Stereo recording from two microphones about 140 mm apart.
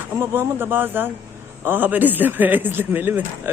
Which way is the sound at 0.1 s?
15° right (ahead or behind).